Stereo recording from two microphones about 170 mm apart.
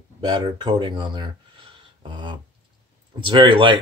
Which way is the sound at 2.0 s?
30° right (ahead or behind).